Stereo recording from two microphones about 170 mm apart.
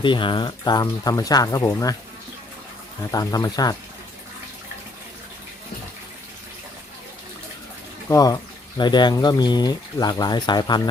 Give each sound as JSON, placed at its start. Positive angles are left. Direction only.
{"t": 0.0, "sound": "speech", "side_deg": 30}
{"t": 3.1, "sound": "speech", "side_deg": 20}
{"t": 8.1, "sound": "speech", "side_deg": 20}